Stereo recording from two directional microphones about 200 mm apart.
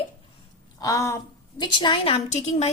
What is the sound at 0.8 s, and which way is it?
A woman's voice, 15° left (ahead or behind).